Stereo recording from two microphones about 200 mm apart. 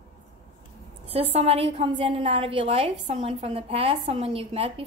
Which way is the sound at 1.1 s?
30° right (ahead or behind).